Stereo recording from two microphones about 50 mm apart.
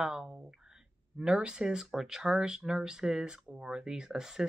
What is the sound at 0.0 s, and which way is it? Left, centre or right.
A woman's voice, centre.